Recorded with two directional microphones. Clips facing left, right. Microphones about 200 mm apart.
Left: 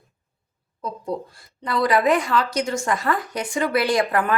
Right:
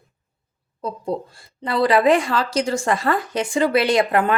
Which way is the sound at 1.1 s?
30° right (ahead or behind).